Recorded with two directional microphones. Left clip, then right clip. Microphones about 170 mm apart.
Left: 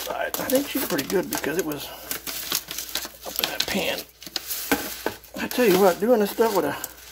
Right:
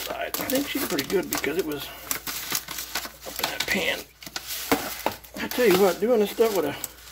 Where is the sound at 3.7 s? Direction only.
15° left (ahead or behind).